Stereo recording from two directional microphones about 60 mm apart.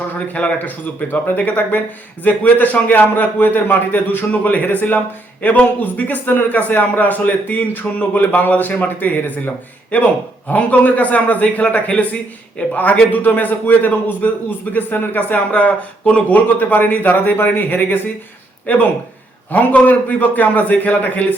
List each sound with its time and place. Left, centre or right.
0.3 s a man's voice: left